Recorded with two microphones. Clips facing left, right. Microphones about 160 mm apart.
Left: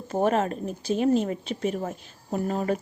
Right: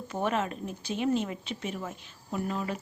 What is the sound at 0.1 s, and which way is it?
Speech, 40° left (ahead or behind).